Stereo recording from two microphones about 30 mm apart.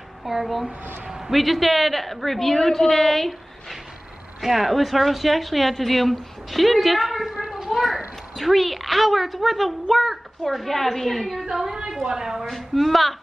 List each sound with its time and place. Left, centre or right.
0.2 s speech: centre
1.0 s a sound: centre
1.3 s a woman's voice: centre
4.4 s speech: centre
7.4 s children playing: centre
7.7 s a sound: centre
8.4 s speech: centre
11.4 s speech: centre
12.7 s speech: centre